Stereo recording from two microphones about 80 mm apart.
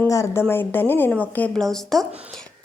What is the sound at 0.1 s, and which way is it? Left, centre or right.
Speech, left.